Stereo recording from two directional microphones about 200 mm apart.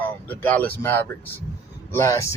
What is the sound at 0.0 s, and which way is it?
A man's voice, 10° left (ahead or behind).